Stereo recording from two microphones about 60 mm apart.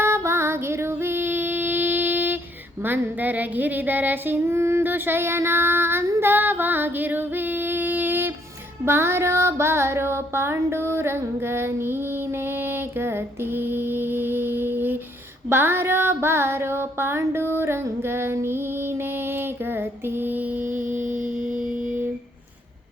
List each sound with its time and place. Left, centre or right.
0.0 s female singing: right
4.8 s female singing: right
8.8 s music: right
12.6 s mantra: right
15.4 s a sound: right